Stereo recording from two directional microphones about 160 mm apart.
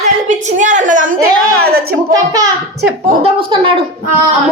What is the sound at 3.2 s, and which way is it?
Speech, 35° right (ahead or behind).